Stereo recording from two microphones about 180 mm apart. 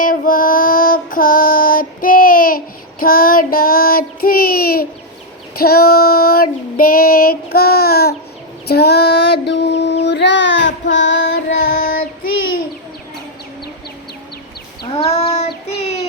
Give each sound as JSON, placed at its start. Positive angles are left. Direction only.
{"t": 0.0, "sound": "female singing", "side_deg": 50}
{"t": 3.0, "sound": "child singing", "side_deg": 55}
{"t": 11.4, "sound": "child singing", "side_deg": 55}
{"t": 14.8, "sound": "child singing", "side_deg": 30}